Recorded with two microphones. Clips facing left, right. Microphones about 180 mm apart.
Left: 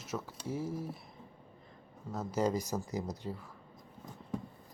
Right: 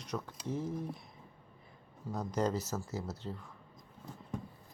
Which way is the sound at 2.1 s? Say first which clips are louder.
Left 1 dB; 5° left (ahead or behind).